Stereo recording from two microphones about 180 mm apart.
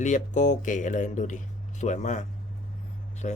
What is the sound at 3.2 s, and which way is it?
Speech, 40° left (ahead or behind).